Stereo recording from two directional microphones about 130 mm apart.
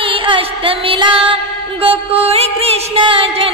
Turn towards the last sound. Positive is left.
turn(degrees=-40)  # may be behind; listen again after turning